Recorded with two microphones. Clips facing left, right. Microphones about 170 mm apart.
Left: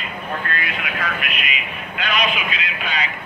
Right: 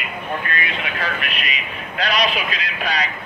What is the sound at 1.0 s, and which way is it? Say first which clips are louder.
A man's voice: right 1 dB; 35° right (ahead or behind).